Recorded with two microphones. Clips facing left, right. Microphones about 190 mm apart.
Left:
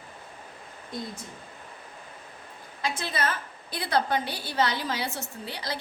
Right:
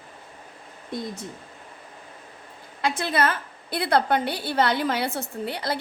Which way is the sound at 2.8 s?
65° right (ahead or behind).